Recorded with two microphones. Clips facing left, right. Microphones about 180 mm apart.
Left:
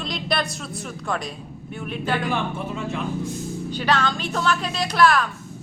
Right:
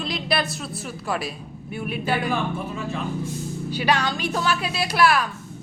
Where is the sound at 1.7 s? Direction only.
10° right (ahead or behind).